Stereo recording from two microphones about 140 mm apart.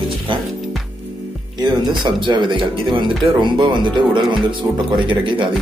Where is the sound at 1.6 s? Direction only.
35° right (ahead or behind).